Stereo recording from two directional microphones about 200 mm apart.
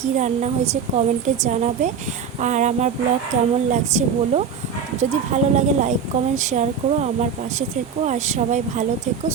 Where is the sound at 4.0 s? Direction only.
35° right (ahead or behind).